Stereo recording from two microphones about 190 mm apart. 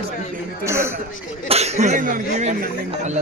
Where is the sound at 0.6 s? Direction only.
15° right (ahead or behind).